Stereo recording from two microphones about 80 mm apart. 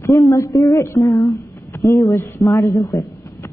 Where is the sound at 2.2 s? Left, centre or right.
Left.